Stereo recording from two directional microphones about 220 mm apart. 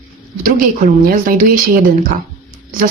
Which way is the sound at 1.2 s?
40° right (ahead or behind).